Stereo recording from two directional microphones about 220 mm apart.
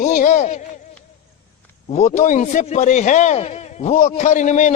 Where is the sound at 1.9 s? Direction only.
30° left (ahead or behind).